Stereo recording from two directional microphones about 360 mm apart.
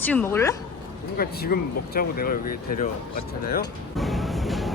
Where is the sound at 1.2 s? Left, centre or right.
Left.